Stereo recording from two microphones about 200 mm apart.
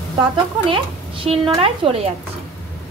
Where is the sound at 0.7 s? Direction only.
25° right (ahead or behind).